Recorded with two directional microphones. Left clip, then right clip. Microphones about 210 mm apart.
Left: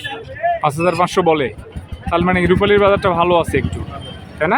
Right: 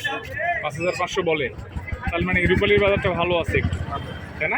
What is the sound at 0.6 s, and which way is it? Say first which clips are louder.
A man's voice: left 9 dB; 35° left (ahead or behind).